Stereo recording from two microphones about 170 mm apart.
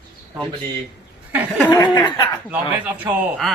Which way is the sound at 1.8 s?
25° left (ahead or behind).